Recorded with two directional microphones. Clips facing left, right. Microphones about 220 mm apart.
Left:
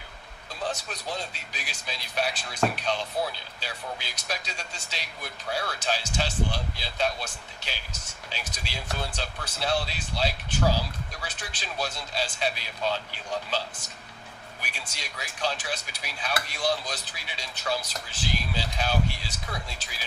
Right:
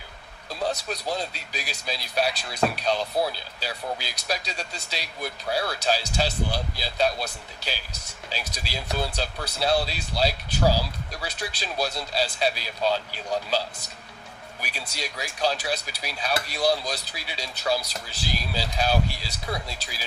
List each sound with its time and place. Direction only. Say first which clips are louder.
0.9 s speech: right 5 dB; 35° right (ahead or behind)
14.6 s speech: right 7 dB; 35° right (ahead or behind)